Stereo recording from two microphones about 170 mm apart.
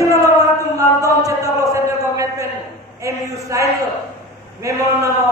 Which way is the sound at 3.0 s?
20° right (ahead or behind).